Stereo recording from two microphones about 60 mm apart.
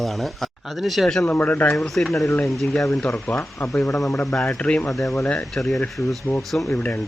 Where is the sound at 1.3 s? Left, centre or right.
Left.